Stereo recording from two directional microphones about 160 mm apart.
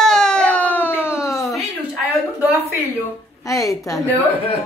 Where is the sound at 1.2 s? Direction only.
20° left (ahead or behind).